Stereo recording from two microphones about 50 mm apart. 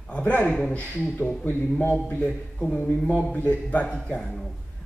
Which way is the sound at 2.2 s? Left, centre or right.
Left.